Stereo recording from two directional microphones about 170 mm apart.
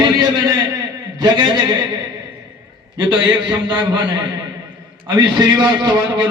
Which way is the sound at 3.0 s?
30° right (ahead or behind).